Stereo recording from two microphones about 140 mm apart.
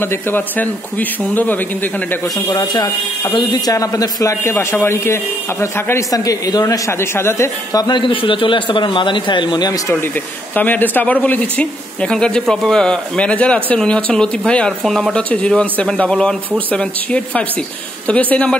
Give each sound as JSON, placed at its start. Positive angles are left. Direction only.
{"t": 0.0, "sound": "speech", "side_deg": 15}
{"t": 2.3, "sound": "a man's voice", "side_deg": 25}
{"t": 10.5, "sound": "speech", "side_deg": 15}